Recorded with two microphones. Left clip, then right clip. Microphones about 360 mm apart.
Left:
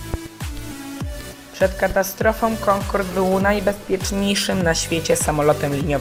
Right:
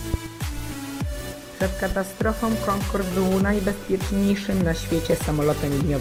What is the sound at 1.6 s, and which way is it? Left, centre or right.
Speech, left.